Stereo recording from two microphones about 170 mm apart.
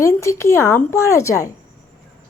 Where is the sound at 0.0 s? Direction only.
15° left (ahead or behind).